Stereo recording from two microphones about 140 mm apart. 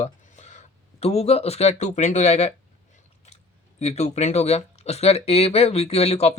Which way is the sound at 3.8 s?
50° left (ahead or behind).